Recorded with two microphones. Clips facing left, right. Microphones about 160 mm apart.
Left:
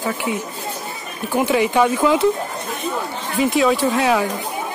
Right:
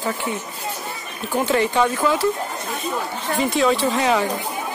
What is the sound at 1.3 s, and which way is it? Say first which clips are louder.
Speech: left 2 dB; 10° left (ahead or behind).